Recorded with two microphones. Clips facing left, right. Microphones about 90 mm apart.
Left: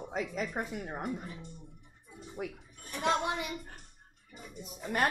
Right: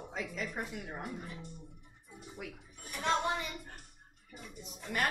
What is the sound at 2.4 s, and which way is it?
Speech, 40° left (ahead or behind).